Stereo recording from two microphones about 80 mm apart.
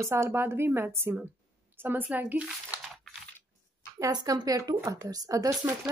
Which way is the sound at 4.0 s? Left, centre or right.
Right.